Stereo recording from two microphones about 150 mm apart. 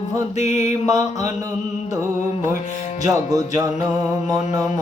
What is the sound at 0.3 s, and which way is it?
Mantra, 45° left (ahead or behind).